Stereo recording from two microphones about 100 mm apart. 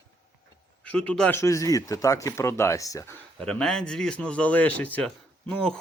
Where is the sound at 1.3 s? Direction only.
30° left (ahead or behind).